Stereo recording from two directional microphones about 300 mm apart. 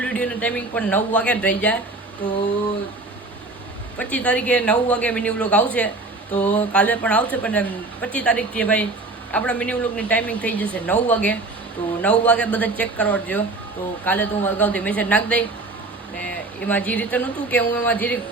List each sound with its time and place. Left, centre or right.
0.0 s a man's voice: centre
3.9 s a man's voice: centre